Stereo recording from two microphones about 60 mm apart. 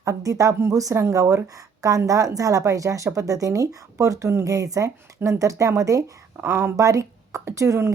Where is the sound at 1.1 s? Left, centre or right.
Right.